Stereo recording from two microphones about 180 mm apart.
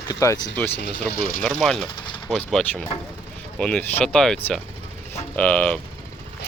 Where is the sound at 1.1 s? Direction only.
55° left (ahead or behind).